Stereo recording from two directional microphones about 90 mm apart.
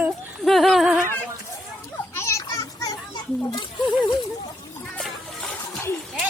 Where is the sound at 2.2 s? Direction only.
35° left (ahead or behind).